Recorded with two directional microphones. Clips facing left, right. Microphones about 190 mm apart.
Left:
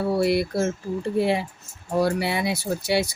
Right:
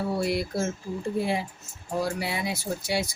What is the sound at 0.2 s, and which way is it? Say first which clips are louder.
Speech: left 5 dB; 65° left (ahead or behind).